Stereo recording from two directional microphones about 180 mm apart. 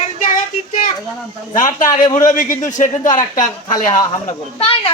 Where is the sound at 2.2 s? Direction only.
45° left (ahead or behind).